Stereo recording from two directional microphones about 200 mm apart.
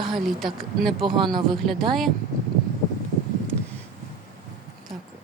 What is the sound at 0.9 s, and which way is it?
Speech, 25° right (ahead or behind).